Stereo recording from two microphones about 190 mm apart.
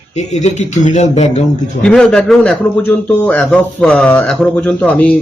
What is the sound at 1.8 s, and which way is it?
A man's voice, 5° left (ahead or behind).